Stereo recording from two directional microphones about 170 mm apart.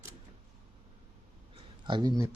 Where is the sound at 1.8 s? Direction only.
25° right (ahead or behind).